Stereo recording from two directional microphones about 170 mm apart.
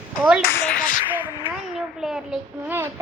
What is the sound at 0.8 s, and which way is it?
Speech, 50° left (ahead or behind).